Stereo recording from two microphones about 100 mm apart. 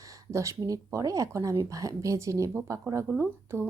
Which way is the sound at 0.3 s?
30° right (ahead or behind).